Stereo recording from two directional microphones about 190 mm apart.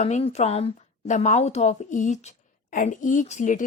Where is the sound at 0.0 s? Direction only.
35° left (ahead or behind).